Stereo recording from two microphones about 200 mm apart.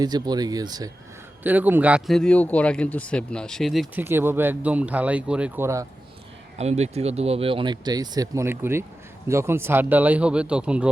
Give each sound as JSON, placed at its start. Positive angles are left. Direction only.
{"t": 0.0, "sound": "speech", "side_deg": -20}
{"t": 1.5, "sound": "speech", "side_deg": -10}
{"t": 4.0, "sound": "speech", "side_deg": -10}
{"t": 6.6, "sound": "speech", "side_deg": -35}